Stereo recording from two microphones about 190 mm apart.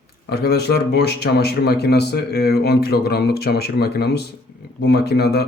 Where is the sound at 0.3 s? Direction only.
60° left (ahead or behind).